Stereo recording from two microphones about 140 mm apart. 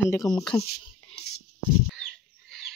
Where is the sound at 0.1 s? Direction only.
25° left (ahead or behind).